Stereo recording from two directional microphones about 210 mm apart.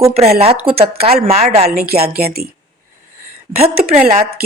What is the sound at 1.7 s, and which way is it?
Speech, 45° right (ahead or behind).